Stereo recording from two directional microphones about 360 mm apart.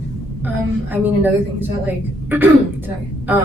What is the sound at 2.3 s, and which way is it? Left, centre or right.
Speech, centre.